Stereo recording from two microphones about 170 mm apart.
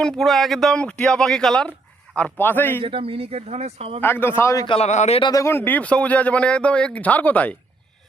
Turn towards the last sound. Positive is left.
turn(degrees=10)  # may be behind; listen again after turning